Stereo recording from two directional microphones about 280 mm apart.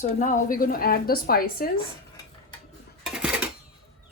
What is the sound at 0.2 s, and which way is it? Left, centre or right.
Speech, left.